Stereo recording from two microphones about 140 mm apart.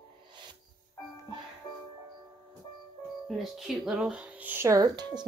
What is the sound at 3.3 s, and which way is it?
Speech, centre (ahead or behind).